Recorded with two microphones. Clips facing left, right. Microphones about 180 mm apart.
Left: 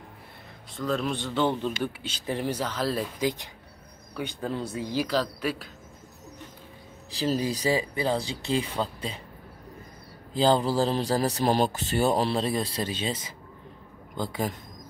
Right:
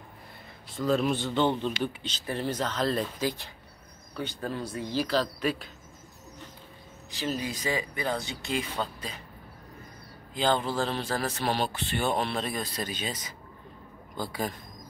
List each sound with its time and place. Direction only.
0.7 s speech: centre (ahead or behind)
4.2 s speech: 20° left (ahead or behind)
7.1 s speech: 35° left (ahead or behind)
10.3 s a man's voice: 35° left (ahead or behind)